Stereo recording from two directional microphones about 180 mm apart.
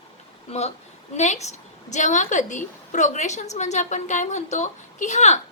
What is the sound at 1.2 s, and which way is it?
A woman's voice, 40° left (ahead or behind).